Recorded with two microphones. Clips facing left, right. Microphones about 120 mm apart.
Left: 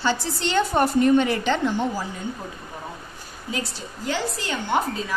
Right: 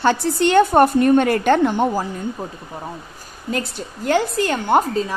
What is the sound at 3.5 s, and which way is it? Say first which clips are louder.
A woman's voice: right 5 dB; 55° right (ahead or behind).